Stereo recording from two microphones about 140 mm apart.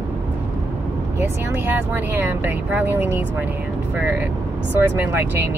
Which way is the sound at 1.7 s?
15° right (ahead or behind).